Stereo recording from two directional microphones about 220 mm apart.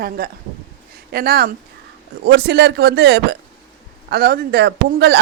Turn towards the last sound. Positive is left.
turn(degrees=-50)  # may be behind; listen again after turning